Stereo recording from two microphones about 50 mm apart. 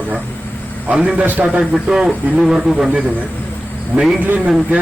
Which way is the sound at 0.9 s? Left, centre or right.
Centre.